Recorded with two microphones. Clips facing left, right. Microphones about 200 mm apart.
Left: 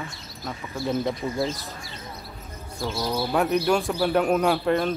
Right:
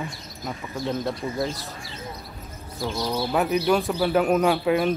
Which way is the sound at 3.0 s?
10° left (ahead or behind).